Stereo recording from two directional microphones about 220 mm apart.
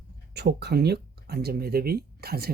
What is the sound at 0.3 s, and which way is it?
Speech, 50° right (ahead or behind).